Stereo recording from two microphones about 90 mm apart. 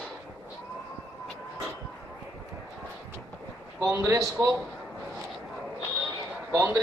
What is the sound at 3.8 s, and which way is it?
Speech, 30° right (ahead or behind).